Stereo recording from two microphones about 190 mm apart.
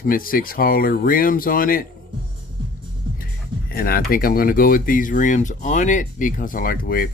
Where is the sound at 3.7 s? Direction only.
50° left (ahead or behind).